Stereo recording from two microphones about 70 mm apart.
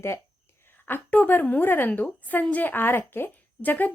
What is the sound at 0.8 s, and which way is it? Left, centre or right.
A woman's voice, left.